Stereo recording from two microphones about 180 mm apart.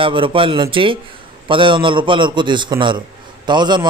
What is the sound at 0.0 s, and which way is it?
A man's voice, 30° right (ahead or behind).